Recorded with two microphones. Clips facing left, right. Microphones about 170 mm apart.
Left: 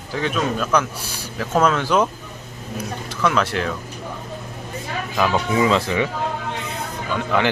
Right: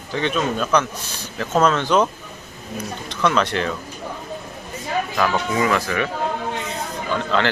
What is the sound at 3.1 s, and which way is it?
Speech, 5° left (ahead or behind).